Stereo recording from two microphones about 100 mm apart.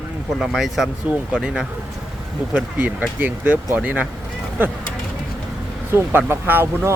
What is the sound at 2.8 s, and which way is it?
Speech, 15° right (ahead or behind).